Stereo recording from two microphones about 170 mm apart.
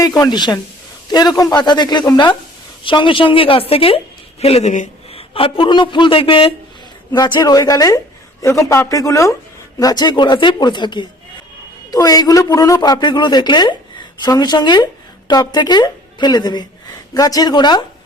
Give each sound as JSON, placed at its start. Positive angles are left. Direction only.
{"t": 0.2, "sound": "a woman's voice", "side_deg": 25}
{"t": 5.1, "sound": "a woman's voice", "side_deg": 30}